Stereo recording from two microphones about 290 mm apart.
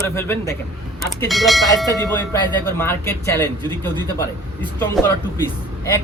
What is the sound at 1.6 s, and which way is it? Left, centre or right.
Speech, centre.